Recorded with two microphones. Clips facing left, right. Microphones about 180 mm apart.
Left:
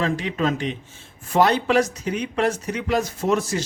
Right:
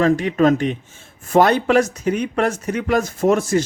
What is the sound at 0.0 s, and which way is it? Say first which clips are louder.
Speech: right 8 dB; 50° right (ahead or behind).